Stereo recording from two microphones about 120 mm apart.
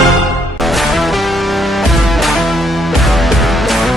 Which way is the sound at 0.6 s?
Centre (ahead or behind).